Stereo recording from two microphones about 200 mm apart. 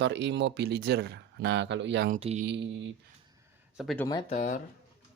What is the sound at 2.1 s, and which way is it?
Speech, 35° right (ahead or behind).